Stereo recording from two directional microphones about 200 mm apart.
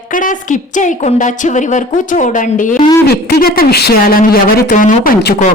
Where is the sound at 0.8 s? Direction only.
40° left (ahead or behind).